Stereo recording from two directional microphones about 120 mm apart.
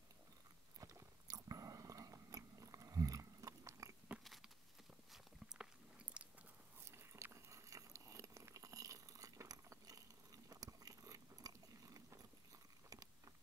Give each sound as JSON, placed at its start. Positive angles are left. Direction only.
{"t": 0.7, "sound": "biting", "side_deg": -30}
{"t": 4.2, "sound": "a sound", "side_deg": 0}
{"t": 5.1, "sound": "biting", "side_deg": -5}
{"t": 6.8, "sound": "biting", "side_deg": -20}